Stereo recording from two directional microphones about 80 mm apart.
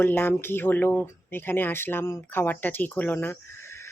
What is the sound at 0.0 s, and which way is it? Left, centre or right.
Speech, left.